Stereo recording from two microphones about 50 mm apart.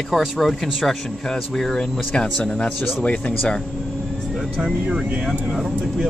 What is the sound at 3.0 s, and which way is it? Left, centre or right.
Speech, left.